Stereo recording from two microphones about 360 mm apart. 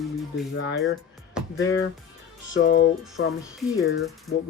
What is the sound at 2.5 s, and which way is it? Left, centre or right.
Speech, left.